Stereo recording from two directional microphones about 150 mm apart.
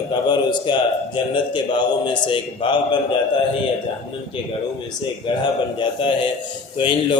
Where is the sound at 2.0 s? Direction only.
30° left (ahead or behind).